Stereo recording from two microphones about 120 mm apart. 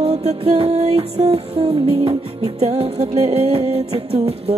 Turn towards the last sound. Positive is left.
turn(degrees=-60)  # may be behind; listen again after turning